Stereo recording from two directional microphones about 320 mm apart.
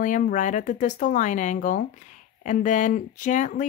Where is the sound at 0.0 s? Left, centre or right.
Left.